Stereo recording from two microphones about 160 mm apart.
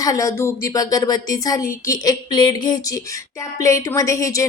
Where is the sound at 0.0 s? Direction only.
20° left (ahead or behind).